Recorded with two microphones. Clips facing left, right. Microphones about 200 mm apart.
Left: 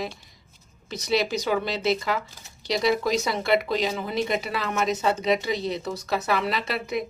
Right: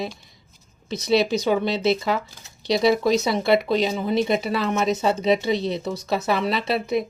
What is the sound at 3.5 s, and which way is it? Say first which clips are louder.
A woman's voice: right 4 dB; 30° right (ahead or behind).